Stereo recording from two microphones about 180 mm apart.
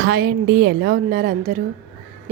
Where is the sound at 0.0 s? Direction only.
60° right (ahead or behind).